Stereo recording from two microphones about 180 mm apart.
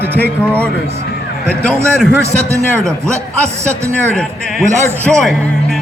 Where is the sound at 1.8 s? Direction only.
15° right (ahead or behind).